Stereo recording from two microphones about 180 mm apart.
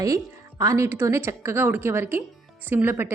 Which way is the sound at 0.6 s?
15° right (ahead or behind).